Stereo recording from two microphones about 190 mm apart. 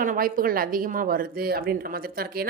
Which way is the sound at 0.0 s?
45° right (ahead or behind).